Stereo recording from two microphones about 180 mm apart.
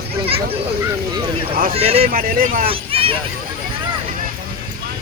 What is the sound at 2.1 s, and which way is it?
Speech, 50° right (ahead or behind).